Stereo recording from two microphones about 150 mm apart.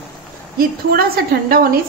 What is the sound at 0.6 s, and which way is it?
A woman's voice, 80° right.